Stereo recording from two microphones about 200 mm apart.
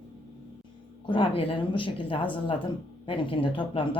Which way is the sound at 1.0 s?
25° left (ahead or behind).